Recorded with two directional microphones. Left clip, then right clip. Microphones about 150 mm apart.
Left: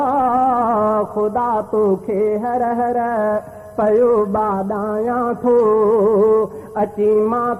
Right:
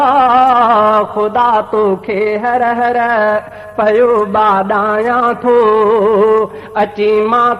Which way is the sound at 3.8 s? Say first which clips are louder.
Right 4 dB; 35° right (ahead or behind).